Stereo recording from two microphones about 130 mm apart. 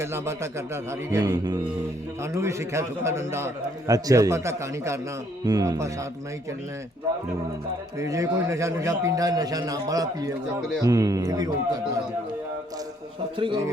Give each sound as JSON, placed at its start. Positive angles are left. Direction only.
{"t": 0.0, "sound": "a man's voice", "side_deg": -20}
{"t": 7.9, "sound": "a man's voice", "side_deg": -25}
{"t": 13.3, "sound": "speech", "side_deg": -40}